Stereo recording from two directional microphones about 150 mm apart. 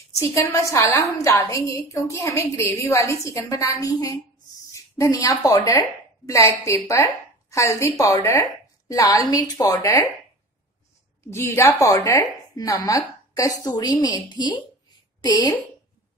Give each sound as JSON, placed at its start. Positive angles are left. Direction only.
{"t": 0.2, "sound": "a woman's voice", "side_deg": 20}
{"t": 11.2, "sound": "a woman's voice", "side_deg": 15}